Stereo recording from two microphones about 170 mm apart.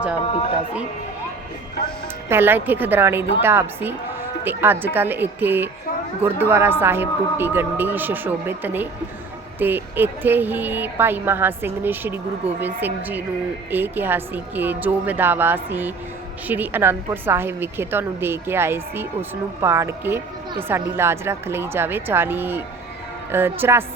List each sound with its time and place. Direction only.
2.3 s speech: 10° right (ahead or behind)